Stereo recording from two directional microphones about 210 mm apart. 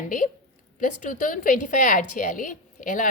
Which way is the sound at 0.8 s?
35° left (ahead or behind).